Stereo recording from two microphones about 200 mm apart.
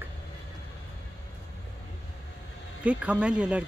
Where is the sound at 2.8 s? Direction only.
5° right (ahead or behind).